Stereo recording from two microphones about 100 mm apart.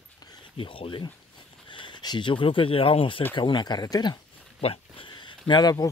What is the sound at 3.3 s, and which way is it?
Speech, 50° left (ahead or behind).